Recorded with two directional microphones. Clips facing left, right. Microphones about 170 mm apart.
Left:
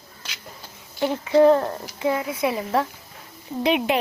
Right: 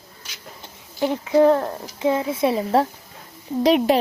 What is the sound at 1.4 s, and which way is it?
Speech, centre (ahead or behind).